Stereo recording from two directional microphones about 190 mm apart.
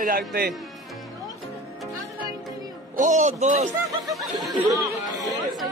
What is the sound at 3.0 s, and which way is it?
Speech, 40° right (ahead or behind).